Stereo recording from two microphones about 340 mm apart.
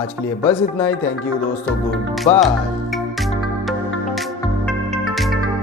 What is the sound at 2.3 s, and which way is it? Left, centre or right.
Speech, centre.